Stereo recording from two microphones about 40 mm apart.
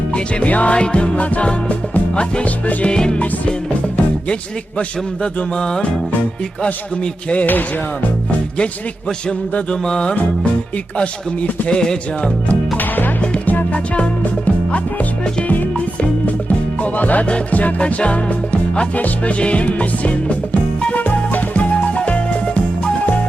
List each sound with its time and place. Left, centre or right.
0.1 s music: left
2.9 s music: left
5.2 s music: centre
7.0 s music: left
9.8 s music: left
11.7 s music: centre
13.4 s music: left
15.4 s music: left
17.7 s music: left